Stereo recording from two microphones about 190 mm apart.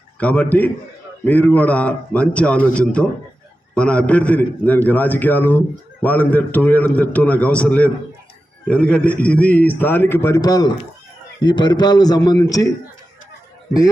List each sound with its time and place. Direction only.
0.2 s a man's voice: 5° left (ahead or behind)